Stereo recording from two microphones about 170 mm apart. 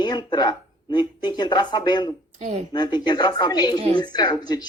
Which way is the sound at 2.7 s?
25° left (ahead or behind).